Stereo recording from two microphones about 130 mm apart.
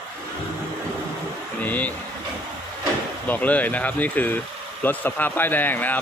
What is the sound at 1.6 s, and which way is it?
Vehicle, 10° left (ahead or behind).